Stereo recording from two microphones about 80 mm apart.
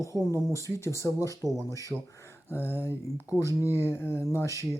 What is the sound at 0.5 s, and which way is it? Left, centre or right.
Speech, left.